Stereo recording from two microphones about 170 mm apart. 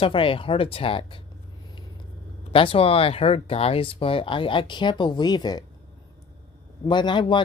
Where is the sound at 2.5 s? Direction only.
35° left (ahead or behind).